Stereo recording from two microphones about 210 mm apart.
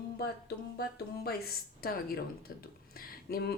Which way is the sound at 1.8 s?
45° left (ahead or behind).